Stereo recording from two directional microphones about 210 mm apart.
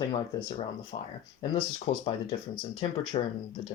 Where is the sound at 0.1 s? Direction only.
25° left (ahead or behind).